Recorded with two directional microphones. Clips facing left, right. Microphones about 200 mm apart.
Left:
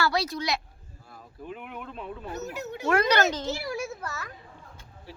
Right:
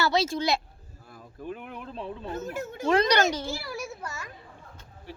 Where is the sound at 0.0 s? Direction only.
25° right (ahead or behind).